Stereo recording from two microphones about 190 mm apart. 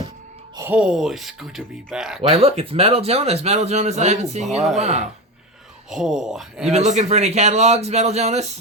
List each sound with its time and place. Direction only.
0.5 s speech: 10° right (ahead or behind)
2.3 s a man's voice: 30° right (ahead or behind)
5.9 s speech: 5° right (ahead or behind)
6.7 s a man's voice: 35° right (ahead or behind)